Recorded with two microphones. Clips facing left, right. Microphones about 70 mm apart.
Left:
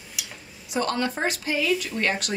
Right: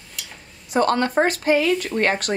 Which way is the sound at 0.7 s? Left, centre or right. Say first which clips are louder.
Right 6 dB; right.